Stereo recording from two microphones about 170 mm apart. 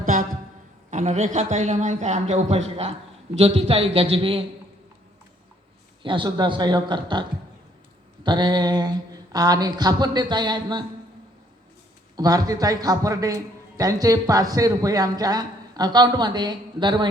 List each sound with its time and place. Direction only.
0.0 s a sound: 50° right (ahead or behind)
0.9 s a man's voice: 45° right (ahead or behind)
6.0 s a man's voice: 30° right (ahead or behind)
12.1 s a man's voice: 20° right (ahead or behind)